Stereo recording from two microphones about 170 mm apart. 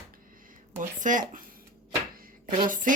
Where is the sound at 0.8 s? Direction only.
50° right (ahead or behind).